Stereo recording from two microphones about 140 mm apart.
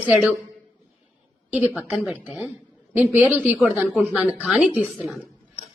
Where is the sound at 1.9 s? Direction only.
10° right (ahead or behind).